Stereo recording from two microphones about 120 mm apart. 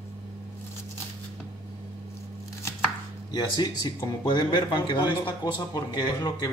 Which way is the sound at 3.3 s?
35° left (ahead or behind).